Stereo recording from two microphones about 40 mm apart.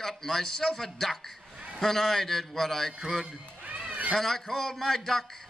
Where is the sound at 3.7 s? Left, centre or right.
Right.